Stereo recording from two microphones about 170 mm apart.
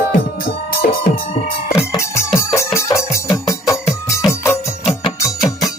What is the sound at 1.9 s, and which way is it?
Music, 15° left (ahead or behind).